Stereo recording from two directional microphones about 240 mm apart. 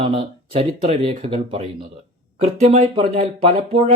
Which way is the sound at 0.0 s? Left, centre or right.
Right.